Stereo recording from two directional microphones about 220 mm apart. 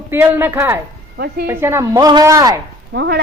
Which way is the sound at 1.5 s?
10° right (ahead or behind).